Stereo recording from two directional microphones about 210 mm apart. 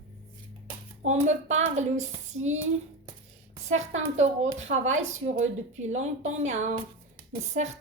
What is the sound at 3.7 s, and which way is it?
Speech, 35° right (ahead or behind).